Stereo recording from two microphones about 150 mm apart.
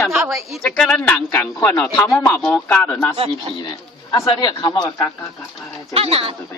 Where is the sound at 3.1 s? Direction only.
40° right (ahead or behind).